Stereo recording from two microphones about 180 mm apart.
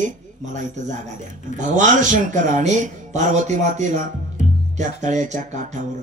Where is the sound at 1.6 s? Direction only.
45° right (ahead or behind).